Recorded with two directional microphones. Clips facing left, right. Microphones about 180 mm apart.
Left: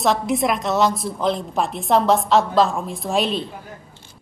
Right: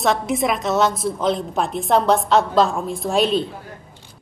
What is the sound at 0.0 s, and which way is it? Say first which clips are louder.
A woman's voice: even; centre (ahead or behind).